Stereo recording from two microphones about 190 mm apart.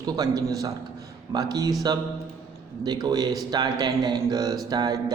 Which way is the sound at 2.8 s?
20° right (ahead or behind).